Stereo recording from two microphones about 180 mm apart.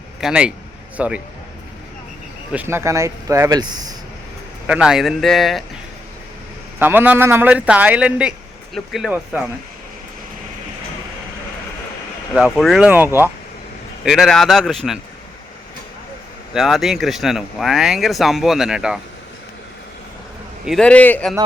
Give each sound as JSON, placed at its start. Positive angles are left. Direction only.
{"t": 0.2, "sound": "a man's voice", "side_deg": -5}
{"t": 2.5, "sound": "a man's voice", "side_deg": -10}
{"t": 4.6, "sound": "speech", "side_deg": -5}
{"t": 6.7, "sound": "a man's voice", "side_deg": -10}
{"t": 12.3, "sound": "speech", "side_deg": 0}
{"t": 16.6, "sound": "speech", "side_deg": 0}
{"t": 20.7, "sound": "a man's voice", "side_deg": 5}